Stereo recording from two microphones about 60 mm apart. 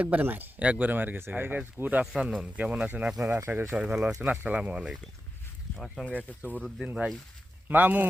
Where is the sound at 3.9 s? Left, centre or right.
Centre.